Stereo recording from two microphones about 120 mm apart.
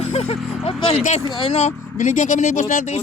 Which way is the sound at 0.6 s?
55° left (ahead or behind).